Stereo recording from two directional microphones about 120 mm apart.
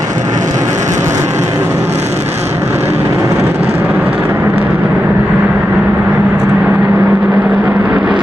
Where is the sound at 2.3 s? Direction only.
20° right (ahead or behind).